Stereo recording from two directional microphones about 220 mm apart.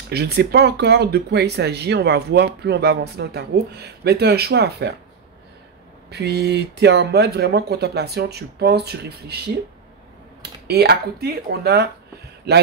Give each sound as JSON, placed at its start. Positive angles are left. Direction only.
{"t": 0.1, "sound": "speech", "side_deg": -45}
{"t": 6.0, "sound": "speech", "side_deg": -50}
{"t": 10.7, "sound": "speech", "side_deg": -45}